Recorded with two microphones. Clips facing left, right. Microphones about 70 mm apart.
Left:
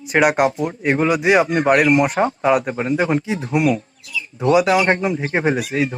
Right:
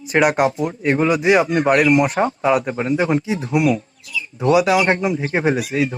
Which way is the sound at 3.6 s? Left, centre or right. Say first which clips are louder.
Even; left.